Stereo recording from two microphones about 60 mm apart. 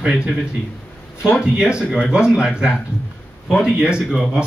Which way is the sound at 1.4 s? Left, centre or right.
Centre.